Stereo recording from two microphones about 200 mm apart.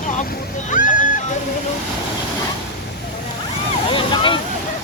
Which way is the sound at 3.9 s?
25° left (ahead or behind).